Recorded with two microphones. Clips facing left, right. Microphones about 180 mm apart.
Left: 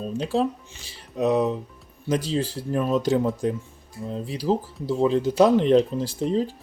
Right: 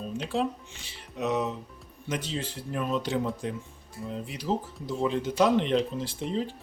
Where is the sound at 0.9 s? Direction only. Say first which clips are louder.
Left 7 dB; 35° left (ahead or behind).